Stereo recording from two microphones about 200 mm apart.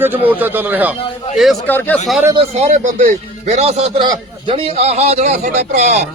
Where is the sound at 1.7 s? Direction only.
10° left (ahead or behind).